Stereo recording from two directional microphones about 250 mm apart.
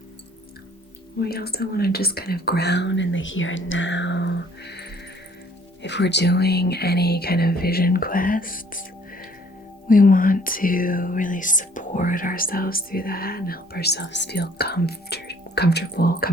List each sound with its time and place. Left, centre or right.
1.2 s speech: left
9.9 s speech: left